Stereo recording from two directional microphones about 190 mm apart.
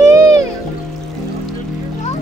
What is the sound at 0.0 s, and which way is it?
Music, 15° right (ahead or behind).